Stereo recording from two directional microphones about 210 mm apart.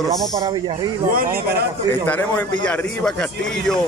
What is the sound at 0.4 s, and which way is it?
Speech, 20° right (ahead or behind).